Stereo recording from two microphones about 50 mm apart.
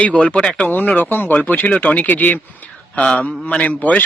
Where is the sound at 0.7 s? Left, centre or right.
Left.